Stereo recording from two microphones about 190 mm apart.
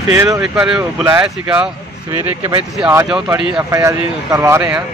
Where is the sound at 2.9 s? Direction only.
15° right (ahead or behind).